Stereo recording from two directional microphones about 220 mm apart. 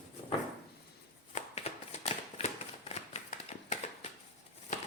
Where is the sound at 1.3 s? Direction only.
30° left (ahead or behind).